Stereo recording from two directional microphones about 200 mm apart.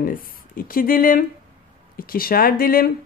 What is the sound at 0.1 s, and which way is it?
Speech, 45° left (ahead or behind).